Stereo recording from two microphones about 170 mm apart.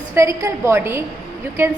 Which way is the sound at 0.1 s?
15° right (ahead or behind).